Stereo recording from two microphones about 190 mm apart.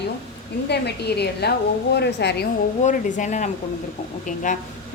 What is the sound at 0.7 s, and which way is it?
A woman's voice, 60° left (ahead or behind).